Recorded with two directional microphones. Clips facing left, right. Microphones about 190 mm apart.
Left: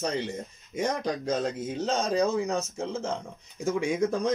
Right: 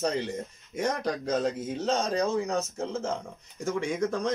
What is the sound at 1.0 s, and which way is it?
Speech, centre (ahead or behind).